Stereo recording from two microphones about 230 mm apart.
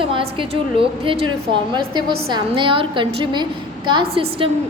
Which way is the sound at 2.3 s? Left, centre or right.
Right.